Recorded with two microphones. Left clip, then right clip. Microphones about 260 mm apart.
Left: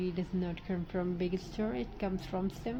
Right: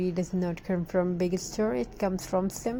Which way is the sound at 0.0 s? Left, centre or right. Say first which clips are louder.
Right 7 dB; right.